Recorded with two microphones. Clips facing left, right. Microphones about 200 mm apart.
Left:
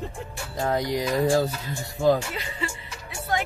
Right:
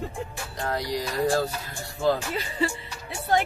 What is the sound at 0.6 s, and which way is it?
Speech, 20° left (ahead or behind).